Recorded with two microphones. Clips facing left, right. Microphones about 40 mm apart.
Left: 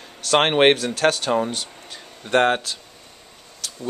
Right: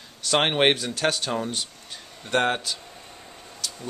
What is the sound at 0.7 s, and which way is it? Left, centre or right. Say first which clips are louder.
Speech: left 5 dB; centre.